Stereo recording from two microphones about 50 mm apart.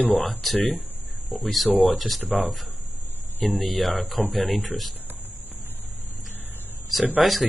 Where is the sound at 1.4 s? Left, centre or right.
Centre.